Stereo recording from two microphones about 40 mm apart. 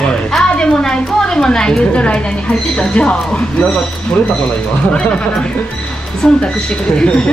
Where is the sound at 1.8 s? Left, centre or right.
Left.